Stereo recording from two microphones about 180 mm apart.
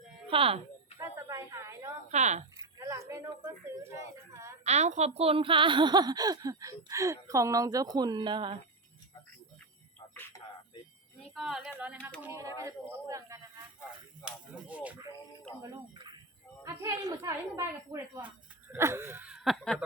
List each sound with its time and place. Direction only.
0.3 s speech: 30° right (ahead or behind)
0.9 s a sound: 15° right (ahead or behind)
2.0 s speech: 40° right (ahead or behind)
2.6 s speech: 15° right (ahead or behind)
4.3 s a sound: 15° right (ahead or behind)
4.6 s a woman's voice: 40° right (ahead or behind)
10.3 s a sound: 20° left (ahead or behind)
11.2 s speech: centre (ahead or behind)
12.2 s speech: 15° right (ahead or behind)
14.3 s speech: 5° right (ahead or behind)
16.0 s music: 25° right (ahead or behind)
16.6 s a woman's voice: 20° right (ahead or behind); by 19.8 s centre (ahead or behind)